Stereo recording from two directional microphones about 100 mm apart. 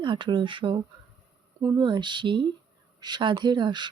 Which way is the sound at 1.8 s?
50° right (ahead or behind).